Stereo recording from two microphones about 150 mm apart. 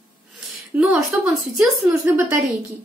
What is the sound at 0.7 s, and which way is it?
Speech, 10° right (ahead or behind).